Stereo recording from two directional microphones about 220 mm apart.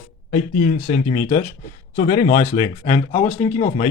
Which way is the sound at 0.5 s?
45° left (ahead or behind).